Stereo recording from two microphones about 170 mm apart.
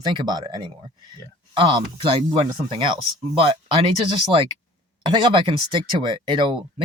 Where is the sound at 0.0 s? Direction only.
25° right (ahead or behind).